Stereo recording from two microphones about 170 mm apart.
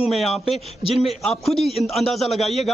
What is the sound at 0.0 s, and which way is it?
A man's voice, centre (ahead or behind).